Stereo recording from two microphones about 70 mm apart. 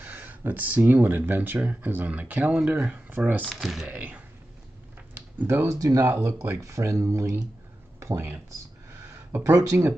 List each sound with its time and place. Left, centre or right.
0.0 s speech: right
5.1 s a sound: right
5.7 s speech: right
6.0 s speech: right
8.0 s a sound: right
9.4 s speech: right